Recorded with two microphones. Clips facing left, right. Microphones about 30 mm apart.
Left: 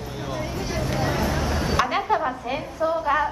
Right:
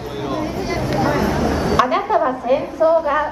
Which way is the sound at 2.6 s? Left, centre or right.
Right.